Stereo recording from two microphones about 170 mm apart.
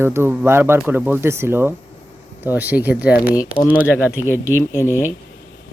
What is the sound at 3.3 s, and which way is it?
Speech, 20° left (ahead or behind).